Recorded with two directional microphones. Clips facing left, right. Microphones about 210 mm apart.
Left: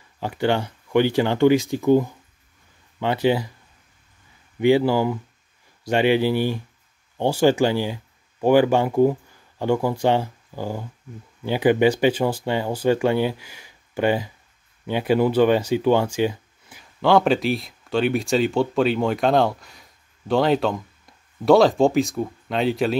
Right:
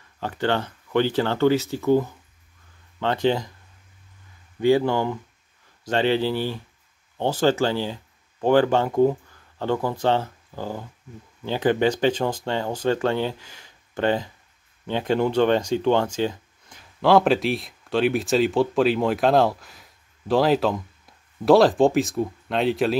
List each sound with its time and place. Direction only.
0.2 s speech: 10° left (ahead or behind)
4.8 s speech: 5° left (ahead or behind)